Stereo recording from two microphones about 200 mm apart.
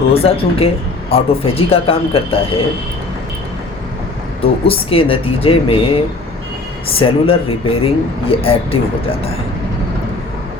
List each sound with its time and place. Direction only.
0.1 s speech: 30° left (ahead or behind)
4.4 s speech: 30° left (ahead or behind)
6.9 s speech: 30° left (ahead or behind)